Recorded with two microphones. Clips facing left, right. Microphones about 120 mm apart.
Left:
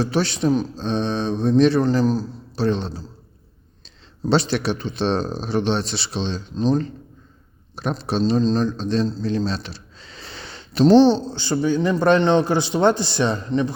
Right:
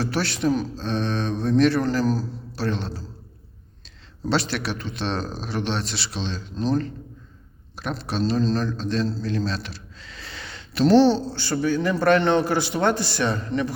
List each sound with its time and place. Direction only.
0.0 s a man's voice: 20° left (ahead or behind)
4.3 s a man's voice: 25° left (ahead or behind)